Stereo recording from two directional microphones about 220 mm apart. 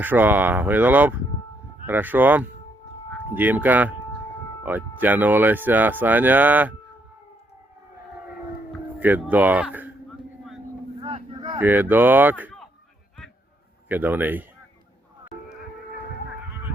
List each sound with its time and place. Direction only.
0.0 s speech: 10° right (ahead or behind)
9.0 s speech: 10° right (ahead or behind)
11.0 s vehicle: 20° right (ahead or behind)
11.6 s speech: 10° right (ahead or behind)
13.8 s speech: 10° right (ahead or behind)